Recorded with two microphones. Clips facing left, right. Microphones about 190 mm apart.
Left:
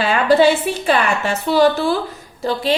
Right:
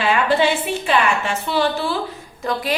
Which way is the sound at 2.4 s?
30° left (ahead or behind).